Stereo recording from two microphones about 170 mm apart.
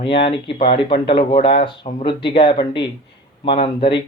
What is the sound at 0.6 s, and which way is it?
Speech, 30° left (ahead or behind).